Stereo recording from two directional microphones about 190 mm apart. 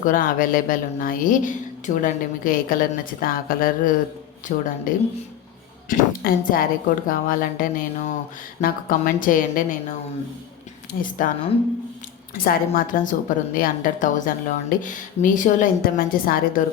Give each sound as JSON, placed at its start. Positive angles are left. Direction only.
{"t": 0.0, "sound": "a woman's voice", "side_deg": 45}
{"t": 10.9, "sound": "a woman's voice", "side_deg": 50}
{"t": 12.3, "sound": "a woman's voice", "side_deg": 50}